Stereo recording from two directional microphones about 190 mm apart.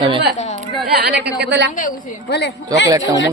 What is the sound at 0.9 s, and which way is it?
Speech, 55° right (ahead or behind).